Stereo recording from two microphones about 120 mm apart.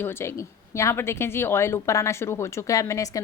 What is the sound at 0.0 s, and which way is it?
A woman's voice, 20° left (ahead or behind).